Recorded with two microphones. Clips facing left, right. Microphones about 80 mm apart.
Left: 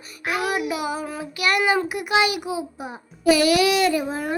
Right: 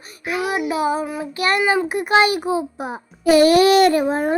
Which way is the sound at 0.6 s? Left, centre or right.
Right.